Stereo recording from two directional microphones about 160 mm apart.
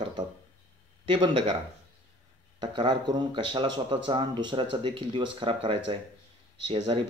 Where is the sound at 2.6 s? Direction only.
30° right (ahead or behind).